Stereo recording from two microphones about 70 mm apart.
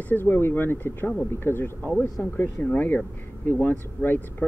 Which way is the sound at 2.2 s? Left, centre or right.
Centre.